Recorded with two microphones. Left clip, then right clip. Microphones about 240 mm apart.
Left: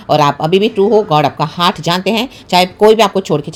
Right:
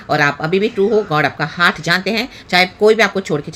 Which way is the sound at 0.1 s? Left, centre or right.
Centre.